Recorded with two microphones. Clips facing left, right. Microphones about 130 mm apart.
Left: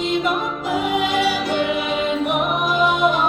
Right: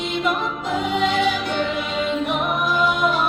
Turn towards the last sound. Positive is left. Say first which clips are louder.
# left 2 dB
turn(degrees=20)  # may be behind; listen again after turning